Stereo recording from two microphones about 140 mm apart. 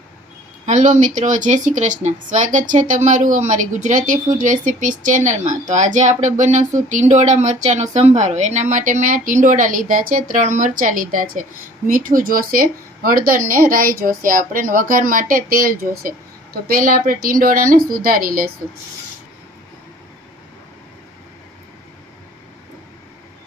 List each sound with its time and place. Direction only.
0.6 s a woman's voice: 65° right (ahead or behind); by 14.2 s 90° right
14.3 s a woman's voice: 80° right